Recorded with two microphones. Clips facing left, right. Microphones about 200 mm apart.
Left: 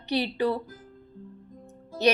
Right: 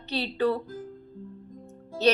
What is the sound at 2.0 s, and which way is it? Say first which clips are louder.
Speech: even; 15° left (ahead or behind).